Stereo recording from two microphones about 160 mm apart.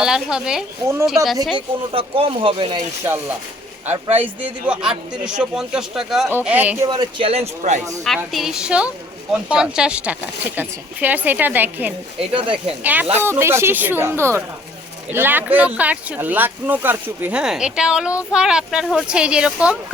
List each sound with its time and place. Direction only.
0.0 s a man's voice: 5° right (ahead or behind)
1.5 s speech: 35° right (ahead or behind)
4.1 s a man's voice: 10° right (ahead or behind)
6.8 s speech: 25° right (ahead or behind)
7.3 s speech: 45° right (ahead or behind)
8.0 s a man's voice: centre (ahead or behind)
12.3 s speech: 35° right (ahead or behind)
12.8 s a man's voice: 10° right (ahead or behind)